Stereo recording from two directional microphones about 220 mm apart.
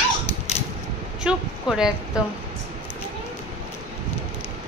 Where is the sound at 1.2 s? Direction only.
Centre (ahead or behind).